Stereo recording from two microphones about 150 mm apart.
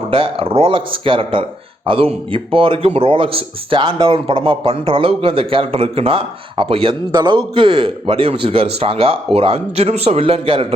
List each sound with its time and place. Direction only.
0.1 s speech: 35° right (ahead or behind)